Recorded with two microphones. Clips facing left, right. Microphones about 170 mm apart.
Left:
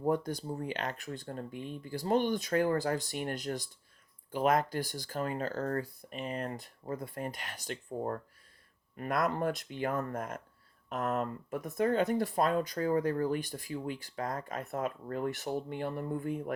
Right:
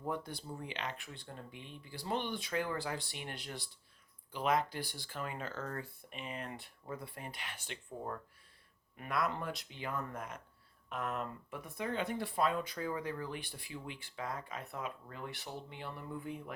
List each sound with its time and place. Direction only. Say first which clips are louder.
0.0 s speech: left 9 dB; 40° left (ahead or behind)